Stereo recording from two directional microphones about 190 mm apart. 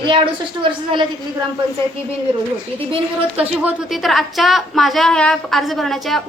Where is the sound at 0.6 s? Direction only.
25° right (ahead or behind).